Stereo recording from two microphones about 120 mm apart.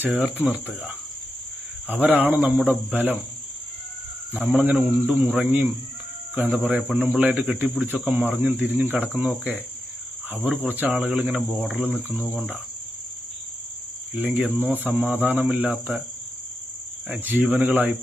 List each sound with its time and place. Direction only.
0.1 s speech: 5° right (ahead or behind)
4.3 s speech: 15° right (ahead or behind)
14.2 s speech: 10° right (ahead or behind)
17.1 s speech: 15° right (ahead or behind)